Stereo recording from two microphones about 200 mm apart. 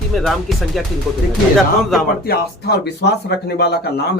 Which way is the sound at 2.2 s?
50° left (ahead or behind).